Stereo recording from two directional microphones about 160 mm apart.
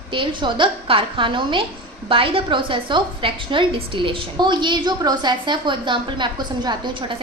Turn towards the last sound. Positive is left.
turn(degrees=-30)  # may be behind; listen again after turning